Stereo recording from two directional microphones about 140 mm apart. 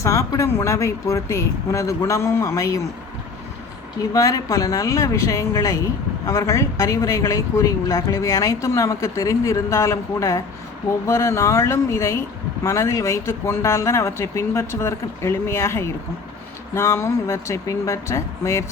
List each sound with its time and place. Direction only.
0.0 s a woman's voice: 25° left (ahead or behind)
4.1 s a woman's voice: 25° left (ahead or behind)